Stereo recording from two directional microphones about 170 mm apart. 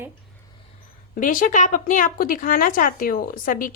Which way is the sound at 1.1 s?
50° left (ahead or behind).